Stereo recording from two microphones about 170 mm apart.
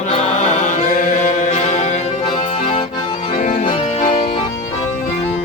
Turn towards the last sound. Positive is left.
turn(degrees=45)  # may be behind; listen again after turning